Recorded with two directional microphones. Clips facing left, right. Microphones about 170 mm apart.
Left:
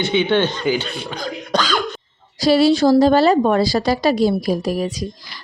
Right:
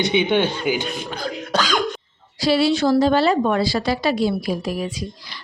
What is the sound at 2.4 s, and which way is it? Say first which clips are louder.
Speech: left 4 dB; 40° left (ahead or behind).